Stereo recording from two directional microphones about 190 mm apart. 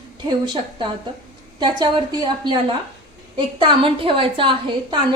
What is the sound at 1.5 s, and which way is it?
A woman's voice, 20° right (ahead or behind).